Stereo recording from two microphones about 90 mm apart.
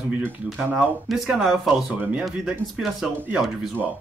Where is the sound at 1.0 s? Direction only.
Centre (ahead or behind).